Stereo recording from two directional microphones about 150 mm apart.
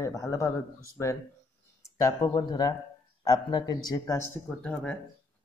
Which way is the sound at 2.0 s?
25° left (ahead or behind).